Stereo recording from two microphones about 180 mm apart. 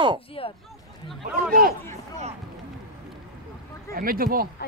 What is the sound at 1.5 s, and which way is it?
Speech, 55° right (ahead or behind).